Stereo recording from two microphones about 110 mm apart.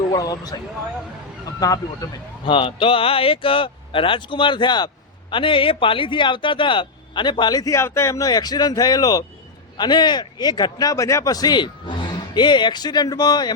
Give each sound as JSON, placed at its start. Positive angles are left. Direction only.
{"t": 0.1, "sound": "speech", "side_deg": 35}
{"t": 1.5, "sound": "speech", "side_deg": 35}
{"t": 2.4, "sound": "speech", "side_deg": 50}